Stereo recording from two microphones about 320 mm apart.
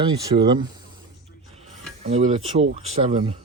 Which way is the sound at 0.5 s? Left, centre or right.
Centre.